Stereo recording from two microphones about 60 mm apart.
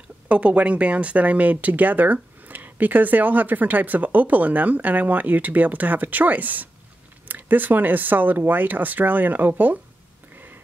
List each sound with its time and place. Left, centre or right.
0.3 s speech: right